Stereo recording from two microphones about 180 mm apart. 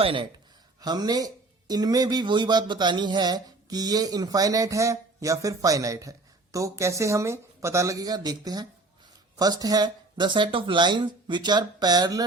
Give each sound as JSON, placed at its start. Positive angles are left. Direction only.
{"t": 0.0, "sound": "speech", "side_deg": -30}